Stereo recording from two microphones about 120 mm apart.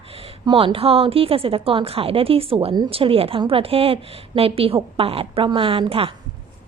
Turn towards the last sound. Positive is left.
turn(degrees=-50)  # may be behind; listen again after turning